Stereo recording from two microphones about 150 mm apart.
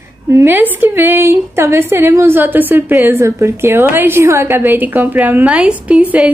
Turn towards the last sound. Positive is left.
turn(degrees=-5)  # may be behind; listen again after turning